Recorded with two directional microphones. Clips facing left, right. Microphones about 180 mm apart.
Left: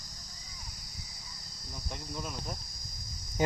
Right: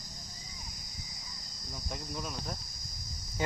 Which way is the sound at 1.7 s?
Centre (ahead or behind).